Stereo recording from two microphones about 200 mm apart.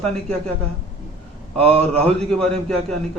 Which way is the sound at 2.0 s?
5° left (ahead or behind).